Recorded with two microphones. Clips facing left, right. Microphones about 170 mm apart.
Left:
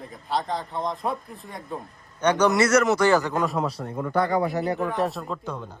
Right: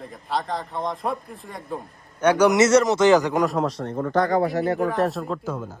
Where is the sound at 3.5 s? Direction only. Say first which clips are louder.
Right 3 dB; centre (ahead or behind).